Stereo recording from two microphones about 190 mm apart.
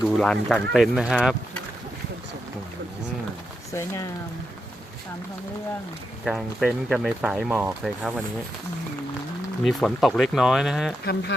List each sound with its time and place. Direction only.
0.2 s speech: 5° left (ahead or behind)
3.7 s speech: 15° left (ahead or behind)
6.2 s speech: centre (ahead or behind)
9.6 s speech: centre (ahead or behind)
11.0 s speech: 55° left (ahead or behind)